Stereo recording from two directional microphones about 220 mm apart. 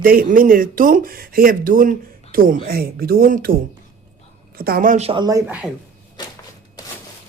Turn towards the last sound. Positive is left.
turn(degrees=-5)  # may be behind; listen again after turning